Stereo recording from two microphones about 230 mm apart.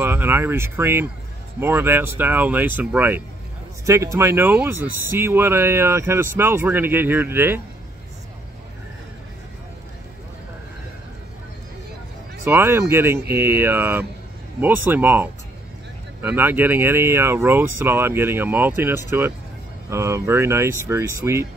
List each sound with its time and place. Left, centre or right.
0.0 s speech: centre
12.4 s speech: centre